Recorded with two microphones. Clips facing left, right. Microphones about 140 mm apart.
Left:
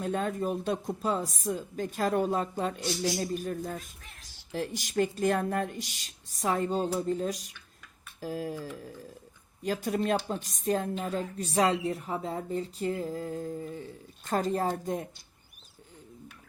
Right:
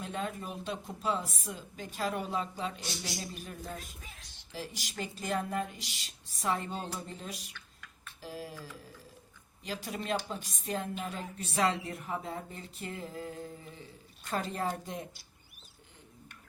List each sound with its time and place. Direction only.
0.0 s speech: 45° left (ahead or behind)
4.0 s a sound: centre (ahead or behind)
4.5 s speech: 50° left (ahead or behind)
9.6 s speech: 50° left (ahead or behind)